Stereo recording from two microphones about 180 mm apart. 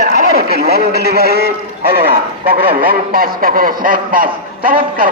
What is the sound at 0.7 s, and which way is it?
Speech, 60° right (ahead or behind).